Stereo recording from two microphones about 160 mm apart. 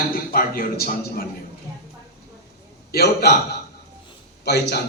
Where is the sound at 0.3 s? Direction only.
65° left (ahead or behind).